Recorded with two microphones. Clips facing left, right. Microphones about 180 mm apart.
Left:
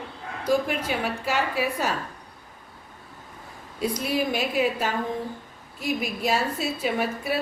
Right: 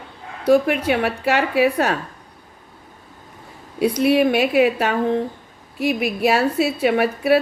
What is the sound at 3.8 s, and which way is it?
A woman's voice, 65° right (ahead or behind).